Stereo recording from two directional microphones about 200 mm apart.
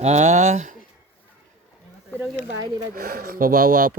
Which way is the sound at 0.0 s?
35° right (ahead or behind).